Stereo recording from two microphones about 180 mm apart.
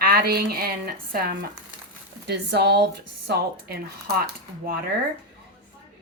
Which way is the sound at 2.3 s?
65° right (ahead or behind).